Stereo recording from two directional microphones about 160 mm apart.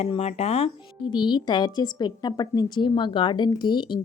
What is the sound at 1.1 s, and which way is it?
Speech, 30° left (ahead or behind).